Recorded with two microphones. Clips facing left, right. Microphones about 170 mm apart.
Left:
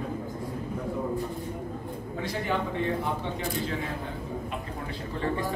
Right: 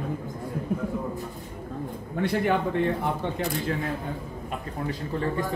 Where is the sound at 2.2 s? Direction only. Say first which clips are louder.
Right 6 dB; 60° right (ahead or behind).